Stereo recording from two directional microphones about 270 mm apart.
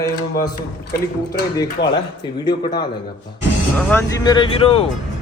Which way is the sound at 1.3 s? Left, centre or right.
Centre.